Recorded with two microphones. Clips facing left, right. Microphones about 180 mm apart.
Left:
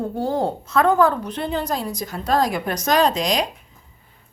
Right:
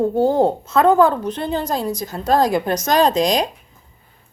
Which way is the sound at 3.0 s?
45° right (ahead or behind).